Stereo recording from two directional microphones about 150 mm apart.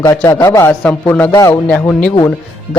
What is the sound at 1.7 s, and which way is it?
Speech, 10° left (ahead or behind).